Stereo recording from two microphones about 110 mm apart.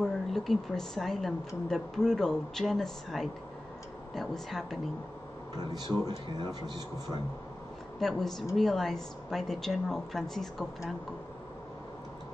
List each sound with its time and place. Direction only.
0.0 s a woman's voice: centre (ahead or behind)
6.0 s speech: 40° right (ahead or behind)
8.0 s a woman's voice: 5° left (ahead or behind)